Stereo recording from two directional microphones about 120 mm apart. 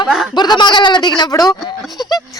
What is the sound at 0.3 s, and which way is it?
Speech, 40° left (ahead or behind).